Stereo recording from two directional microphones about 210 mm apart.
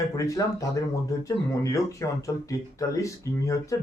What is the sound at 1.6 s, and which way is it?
Speech, 15° left (ahead or behind).